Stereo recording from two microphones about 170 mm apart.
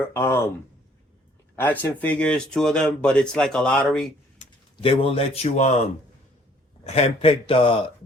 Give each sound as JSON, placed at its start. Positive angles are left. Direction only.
{"t": 0.0, "sound": "speech", "side_deg": 15}
{"t": 1.5, "sound": "speech", "side_deg": 10}
{"t": 4.4, "sound": "speech", "side_deg": 35}
{"t": 6.8, "sound": "speech", "side_deg": 35}